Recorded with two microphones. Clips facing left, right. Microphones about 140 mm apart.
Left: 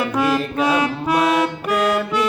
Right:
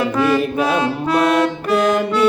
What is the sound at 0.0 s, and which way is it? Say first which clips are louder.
Music: right 3 dB; 10° left (ahead or behind).